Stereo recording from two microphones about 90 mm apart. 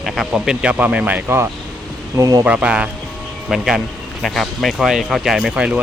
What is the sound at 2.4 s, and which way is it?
Speech, 15° right (ahead or behind).